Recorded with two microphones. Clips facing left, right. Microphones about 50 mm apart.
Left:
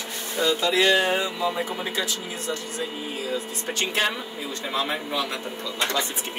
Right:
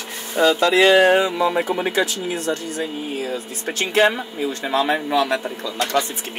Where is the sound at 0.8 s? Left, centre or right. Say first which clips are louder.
Right 8 dB; right.